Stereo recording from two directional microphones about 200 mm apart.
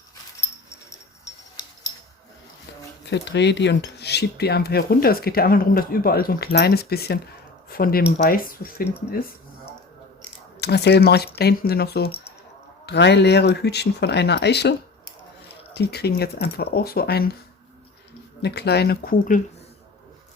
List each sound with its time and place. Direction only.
0.9 s a sound: 15° left (ahead or behind)
3.1 s cutlery: 60° left (ahead or behind)
7.7 s speech: 50° left (ahead or behind)
8.2 s cutlery: 45° left (ahead or behind)
10.6 s speech: 55° left (ahead or behind)
11.3 s cutlery: 50° left (ahead or behind)
12.8 s speech: 60° left (ahead or behind)
15.7 s cutlery: 55° left (ahead or behind)
18.4 s cutlery: 55° left (ahead or behind)